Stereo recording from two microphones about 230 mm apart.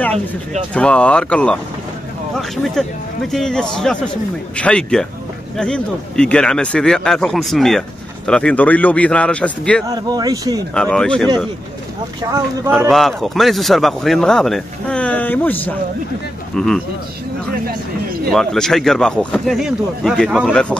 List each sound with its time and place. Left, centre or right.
0.7 s speech: centre
9.8 s speech: centre
10.7 s speech: centre
12.2 s speech: centre
12.7 s speech: centre
18.3 s speech: centre